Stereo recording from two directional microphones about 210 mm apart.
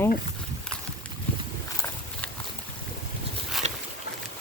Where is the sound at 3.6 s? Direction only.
30° right (ahead or behind).